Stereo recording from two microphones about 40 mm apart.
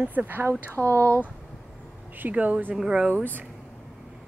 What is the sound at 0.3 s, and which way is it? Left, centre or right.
Speech, right.